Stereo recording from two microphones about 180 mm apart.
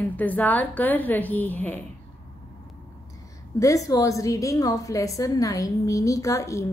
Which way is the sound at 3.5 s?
20° left (ahead or behind).